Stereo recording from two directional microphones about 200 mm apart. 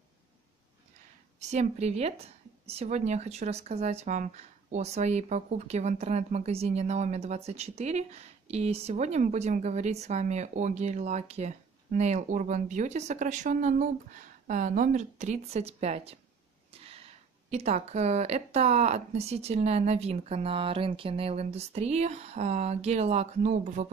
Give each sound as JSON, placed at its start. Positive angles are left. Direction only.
{"t": 1.4, "sound": "speech", "side_deg": -35}
{"t": 17.5, "sound": "speech", "side_deg": -35}